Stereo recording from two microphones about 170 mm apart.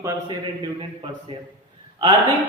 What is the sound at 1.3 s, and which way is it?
Speech, 30° right (ahead or behind).